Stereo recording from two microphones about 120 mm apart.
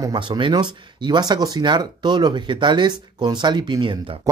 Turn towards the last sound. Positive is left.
turn(degrees=-40)  # may be behind; listen again after turning